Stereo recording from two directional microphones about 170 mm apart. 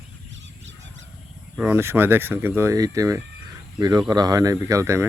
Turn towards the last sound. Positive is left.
turn(degrees=-15)  # may be behind; listen again after turning